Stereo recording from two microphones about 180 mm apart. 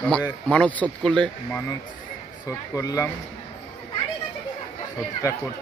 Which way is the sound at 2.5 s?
15° left (ahead or behind).